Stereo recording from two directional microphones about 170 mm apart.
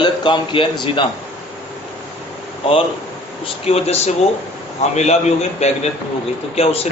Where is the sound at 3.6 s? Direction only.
35° left (ahead or behind).